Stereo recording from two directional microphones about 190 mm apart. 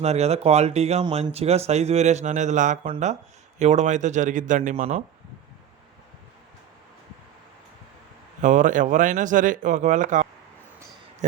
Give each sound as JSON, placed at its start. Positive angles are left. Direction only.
{"t": 0.0, "sound": "speech", "side_deg": -35}
{"t": 8.4, "sound": "speech", "side_deg": -40}